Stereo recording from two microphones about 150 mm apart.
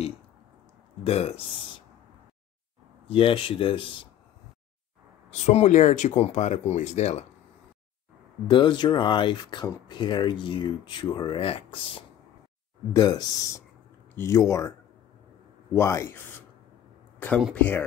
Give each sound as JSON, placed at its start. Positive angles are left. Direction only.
{"t": 1.0, "sound": "speech", "side_deg": 45}
{"t": 3.1, "sound": "speech", "side_deg": 35}
{"t": 5.5, "sound": "speech", "side_deg": 50}
{"t": 8.5, "sound": "speech", "side_deg": 30}
{"t": 12.9, "sound": "speech", "side_deg": 25}
{"t": 15.7, "sound": "speech", "side_deg": 20}
{"t": 17.6, "sound": "speech", "side_deg": 15}